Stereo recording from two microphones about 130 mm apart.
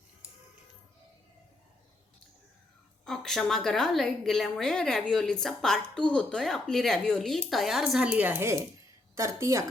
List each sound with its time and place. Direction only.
3.0 s a woman's voice: 5° left (ahead or behind); by 9.6 s 20° right (ahead or behind)